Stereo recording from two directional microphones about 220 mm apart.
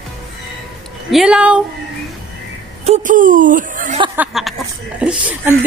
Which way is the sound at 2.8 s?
35° right (ahead or behind).